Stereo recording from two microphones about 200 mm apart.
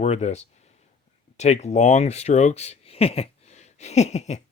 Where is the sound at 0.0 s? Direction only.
35° left (ahead or behind).